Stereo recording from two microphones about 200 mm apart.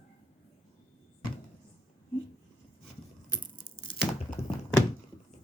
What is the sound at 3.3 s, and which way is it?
Tearing, 25° left (ahead or behind).